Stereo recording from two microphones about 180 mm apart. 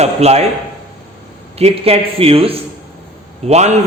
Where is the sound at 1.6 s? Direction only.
35° right (ahead or behind).